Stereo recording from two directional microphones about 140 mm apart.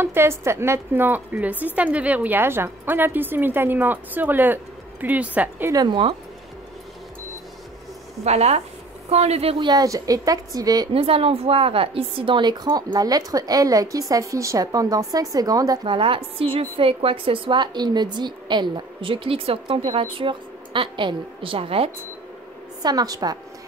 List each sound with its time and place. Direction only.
0.0 s a woman's voice: 15° right (ahead or behind)
5.7 s a woman's voice: 30° right (ahead or behind)
8.2 s a woman's voice: 50° right (ahead or behind); by 10.9 s 25° right (ahead or behind)
10.9 s a woman's voice: 40° right (ahead or behind)
22.8 s a woman's voice: 25° right (ahead or behind)